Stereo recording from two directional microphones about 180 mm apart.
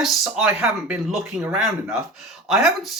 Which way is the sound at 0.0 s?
5° right (ahead or behind).